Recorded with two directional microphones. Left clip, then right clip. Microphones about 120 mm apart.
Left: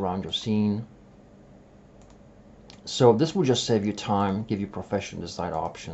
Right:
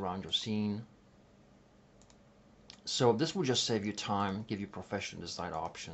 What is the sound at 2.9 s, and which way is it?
Speech, 5° right (ahead or behind).